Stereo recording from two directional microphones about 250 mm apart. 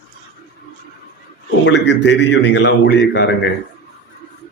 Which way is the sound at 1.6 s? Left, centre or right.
Left.